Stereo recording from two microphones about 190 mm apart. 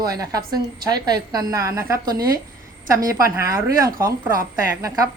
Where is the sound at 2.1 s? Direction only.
50° right (ahead or behind).